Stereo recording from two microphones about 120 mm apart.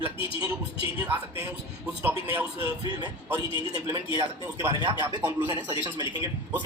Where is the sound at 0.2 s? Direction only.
45° left (ahead or behind).